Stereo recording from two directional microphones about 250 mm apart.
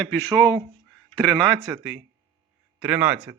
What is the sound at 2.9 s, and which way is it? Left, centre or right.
Speech, centre.